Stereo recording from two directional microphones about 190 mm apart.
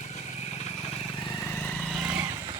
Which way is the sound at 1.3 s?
5° left (ahead or behind).